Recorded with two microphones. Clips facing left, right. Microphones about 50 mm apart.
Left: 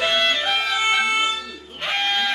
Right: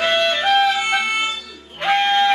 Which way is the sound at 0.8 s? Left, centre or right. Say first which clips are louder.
Even; centre.